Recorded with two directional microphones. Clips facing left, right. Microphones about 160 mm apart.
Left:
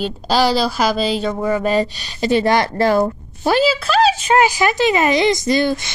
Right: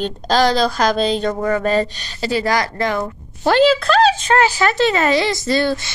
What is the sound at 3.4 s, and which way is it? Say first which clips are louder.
A woman's voice: right 3 dB; 10° left (ahead or behind).